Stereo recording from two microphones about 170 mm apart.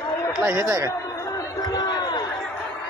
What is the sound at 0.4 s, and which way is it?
Speech, 15° right (ahead or behind).